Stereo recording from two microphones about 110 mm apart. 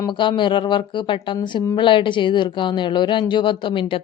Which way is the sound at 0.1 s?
45° left (ahead or behind).